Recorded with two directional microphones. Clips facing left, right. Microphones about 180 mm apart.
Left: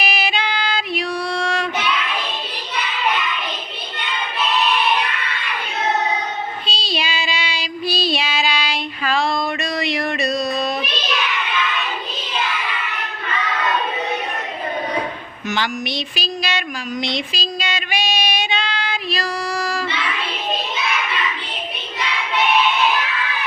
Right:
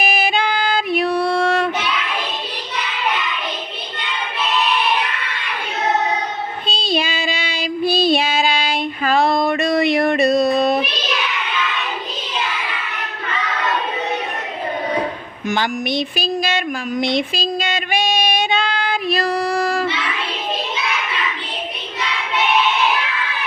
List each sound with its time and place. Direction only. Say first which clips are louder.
0.0 s music: right 3 dB; 50° right (ahead or behind)
6.7 s child singing: right 9 dB; 50° right (ahead or behind)
15.4 s a sound: right 3 dB; 50° right (ahead or behind)